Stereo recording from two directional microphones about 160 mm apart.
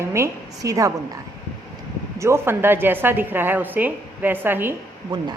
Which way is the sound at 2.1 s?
15° right (ahead or behind).